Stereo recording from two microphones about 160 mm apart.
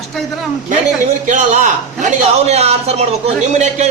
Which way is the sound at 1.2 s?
50° right (ahead or behind).